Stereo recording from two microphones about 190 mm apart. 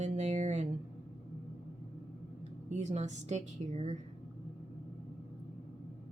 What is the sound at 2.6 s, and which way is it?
A woman's voice, 35° right (ahead or behind).